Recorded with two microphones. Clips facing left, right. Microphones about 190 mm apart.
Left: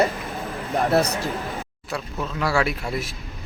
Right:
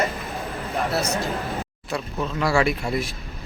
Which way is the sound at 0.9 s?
60° left (ahead or behind).